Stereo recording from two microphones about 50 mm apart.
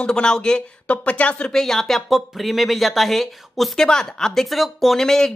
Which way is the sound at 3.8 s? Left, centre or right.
Centre.